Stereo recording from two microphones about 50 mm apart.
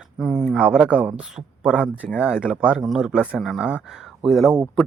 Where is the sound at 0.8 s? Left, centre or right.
Right.